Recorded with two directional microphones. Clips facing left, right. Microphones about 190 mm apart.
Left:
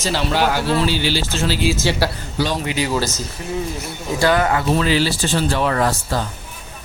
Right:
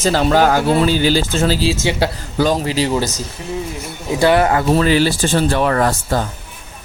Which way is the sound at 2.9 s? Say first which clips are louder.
Right 2 dB; 15° right (ahead or behind).